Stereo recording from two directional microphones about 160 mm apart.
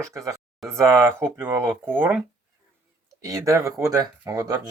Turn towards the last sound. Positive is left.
turn(degrees=-25)  # may be behind; listen again after turning